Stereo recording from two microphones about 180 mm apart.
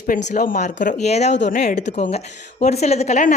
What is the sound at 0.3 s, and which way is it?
A woman's voice, 50° left (ahead or behind).